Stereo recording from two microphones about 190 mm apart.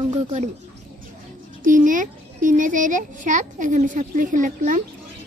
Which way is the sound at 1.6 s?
45° right (ahead or behind).